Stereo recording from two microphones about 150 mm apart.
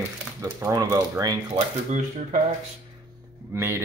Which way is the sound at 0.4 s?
20° right (ahead or behind).